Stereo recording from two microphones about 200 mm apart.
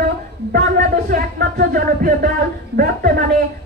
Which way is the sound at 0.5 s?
50° right (ahead or behind).